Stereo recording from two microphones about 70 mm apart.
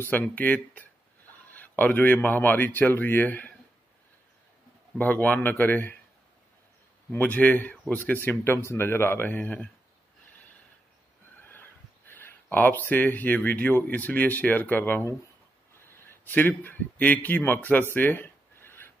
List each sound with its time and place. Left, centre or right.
0.0 s speech: left
4.9 s speech: left
7.1 s speech: left
8.0 s speech: left
12.1 s speech: left
16.3 s a man's voice: left